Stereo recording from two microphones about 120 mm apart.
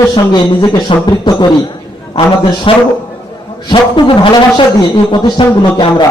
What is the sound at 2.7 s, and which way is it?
A man's voice, 45° left (ahead or behind).